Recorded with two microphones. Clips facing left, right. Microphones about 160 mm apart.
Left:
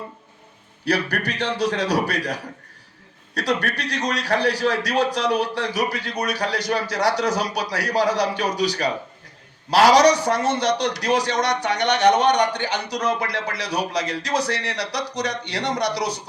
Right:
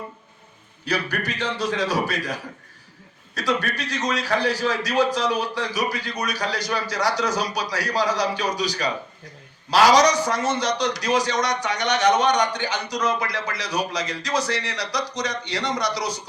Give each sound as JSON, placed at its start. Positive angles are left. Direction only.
{"t": 0.9, "sound": "a man's voice", "side_deg": 65}